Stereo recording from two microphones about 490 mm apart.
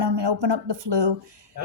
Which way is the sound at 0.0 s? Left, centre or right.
Right.